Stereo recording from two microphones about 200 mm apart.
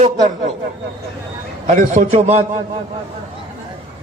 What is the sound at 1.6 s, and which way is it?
Speech, 40° right (ahead or behind).